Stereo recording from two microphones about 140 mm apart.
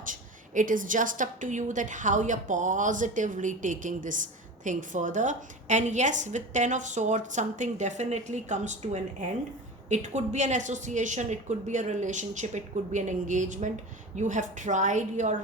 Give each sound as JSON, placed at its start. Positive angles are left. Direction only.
{"t": 0.0, "sound": "a woman's voice", "side_deg": -70}